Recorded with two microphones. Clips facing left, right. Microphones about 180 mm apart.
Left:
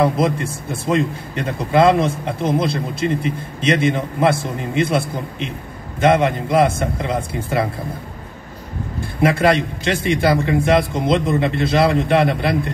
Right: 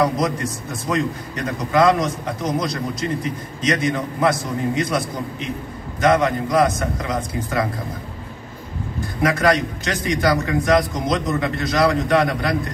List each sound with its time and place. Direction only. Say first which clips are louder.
0.0 s speech: left 3 dB; 30° left (ahead or behind)
9.2 s speech: left 2 dB; 25° left (ahead or behind)